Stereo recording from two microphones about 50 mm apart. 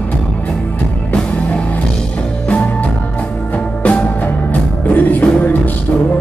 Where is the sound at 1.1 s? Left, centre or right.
Left.